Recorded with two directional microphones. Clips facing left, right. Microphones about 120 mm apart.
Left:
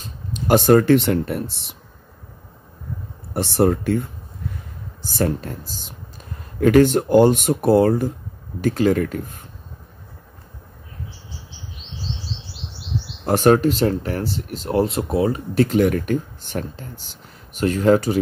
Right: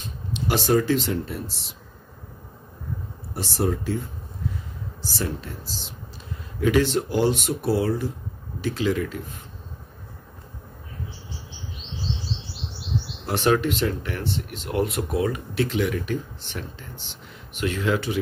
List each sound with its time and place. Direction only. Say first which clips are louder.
0.0 s speech: even; 45° left (ahead or behind)
3.3 s speech: left 8 dB; 60° left (ahead or behind)
13.2 s speech: left 7 dB; 45° left (ahead or behind)
15.5 s speech: left 9 dB; 45° left (ahead or behind)